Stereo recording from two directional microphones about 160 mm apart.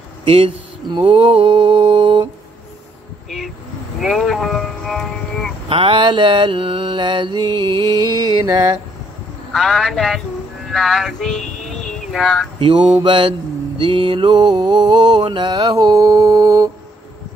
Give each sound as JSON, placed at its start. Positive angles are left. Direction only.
{"t": 0.2, "sound": "mantra", "side_deg": -35}
{"t": 3.3, "sound": "speech", "side_deg": 0}
{"t": 5.7, "sound": "mantra", "side_deg": -30}
{"t": 9.5, "sound": "speech", "side_deg": 5}
{"t": 10.7, "sound": "a sound", "side_deg": 0}
{"t": 12.5, "sound": "mantra", "side_deg": -35}